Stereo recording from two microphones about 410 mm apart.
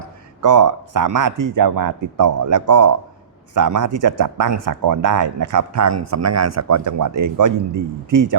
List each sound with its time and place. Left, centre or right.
0.4 s speech: right